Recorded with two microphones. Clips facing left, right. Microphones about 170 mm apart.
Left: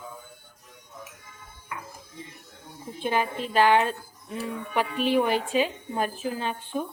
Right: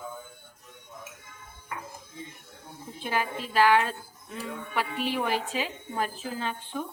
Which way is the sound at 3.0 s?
25° left (ahead or behind).